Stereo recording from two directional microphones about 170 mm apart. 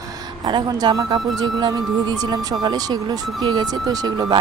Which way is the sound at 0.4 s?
25° right (ahead or behind).